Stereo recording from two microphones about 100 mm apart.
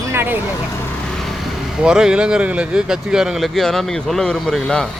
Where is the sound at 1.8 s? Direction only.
5° right (ahead or behind).